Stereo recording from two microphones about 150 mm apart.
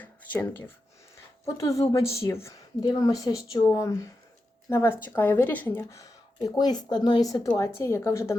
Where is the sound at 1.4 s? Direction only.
20° left (ahead or behind).